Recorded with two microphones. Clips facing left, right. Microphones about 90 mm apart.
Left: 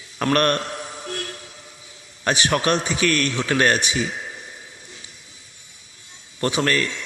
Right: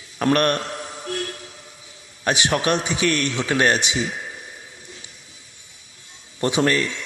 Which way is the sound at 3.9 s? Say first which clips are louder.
Even; centre (ahead or behind).